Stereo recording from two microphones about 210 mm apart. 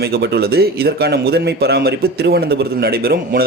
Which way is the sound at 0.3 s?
50° right (ahead or behind).